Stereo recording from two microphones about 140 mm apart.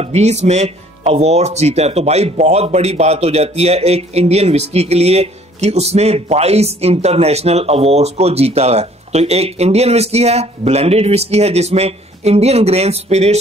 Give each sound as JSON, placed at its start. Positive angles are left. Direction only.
{"t": 0.0, "sound": "speech", "side_deg": -50}